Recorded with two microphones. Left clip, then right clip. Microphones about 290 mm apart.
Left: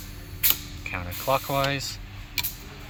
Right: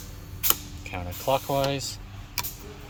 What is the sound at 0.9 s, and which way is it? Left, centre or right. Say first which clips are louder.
Speech: left 1 dB; centre.